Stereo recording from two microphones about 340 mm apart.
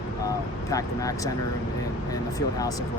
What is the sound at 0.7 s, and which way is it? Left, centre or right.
Speech, centre.